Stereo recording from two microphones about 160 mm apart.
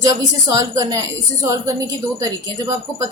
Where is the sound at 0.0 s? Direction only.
20° right (ahead or behind).